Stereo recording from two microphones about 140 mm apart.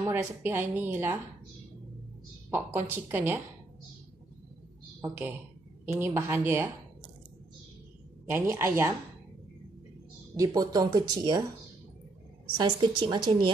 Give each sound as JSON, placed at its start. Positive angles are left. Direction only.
{"t": 0.1, "sound": "a woman's voice", "side_deg": -15}
{"t": 2.5, "sound": "a woman's voice", "side_deg": -15}
{"t": 5.0, "sound": "a woman's voice", "side_deg": -20}
{"t": 8.3, "sound": "a woman's voice", "side_deg": -15}
{"t": 10.3, "sound": "speech", "side_deg": -25}
{"t": 12.5, "sound": "speech", "side_deg": -35}